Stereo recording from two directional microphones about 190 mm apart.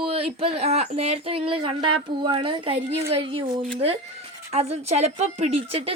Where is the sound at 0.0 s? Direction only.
30° right (ahead or behind).